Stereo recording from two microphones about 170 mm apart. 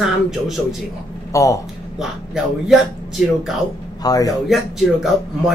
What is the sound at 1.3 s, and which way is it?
Speech, 20° left (ahead or behind).